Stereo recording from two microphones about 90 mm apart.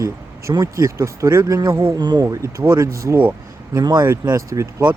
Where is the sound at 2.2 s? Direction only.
35° right (ahead or behind).